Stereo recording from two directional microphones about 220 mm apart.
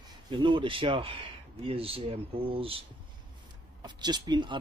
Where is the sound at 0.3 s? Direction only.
20° right (ahead or behind).